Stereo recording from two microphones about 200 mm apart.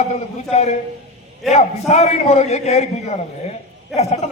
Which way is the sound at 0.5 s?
35° left (ahead or behind).